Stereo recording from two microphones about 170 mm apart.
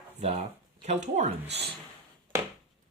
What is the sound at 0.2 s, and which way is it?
Speech, 40° right (ahead or behind).